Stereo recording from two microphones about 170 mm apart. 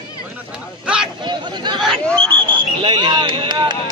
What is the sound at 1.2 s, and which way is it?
Speech, 25° right (ahead or behind).